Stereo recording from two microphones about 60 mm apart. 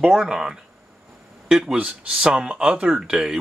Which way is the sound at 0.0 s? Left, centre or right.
Centre.